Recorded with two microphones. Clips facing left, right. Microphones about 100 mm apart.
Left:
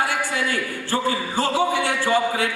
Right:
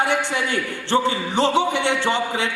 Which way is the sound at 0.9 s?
20° right (ahead or behind).